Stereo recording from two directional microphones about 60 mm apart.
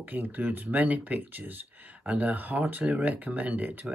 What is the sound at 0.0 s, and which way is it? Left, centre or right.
Speech, right.